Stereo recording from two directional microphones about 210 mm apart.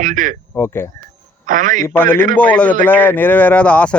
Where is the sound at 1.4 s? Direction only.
40° right (ahead or behind).